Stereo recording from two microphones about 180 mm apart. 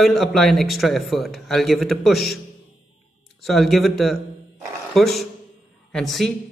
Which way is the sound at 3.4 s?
Centre (ahead or behind).